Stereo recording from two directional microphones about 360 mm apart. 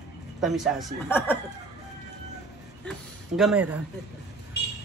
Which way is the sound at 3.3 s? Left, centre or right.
Centre.